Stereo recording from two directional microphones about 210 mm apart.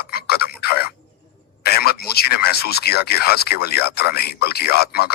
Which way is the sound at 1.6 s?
50° left (ahead or behind).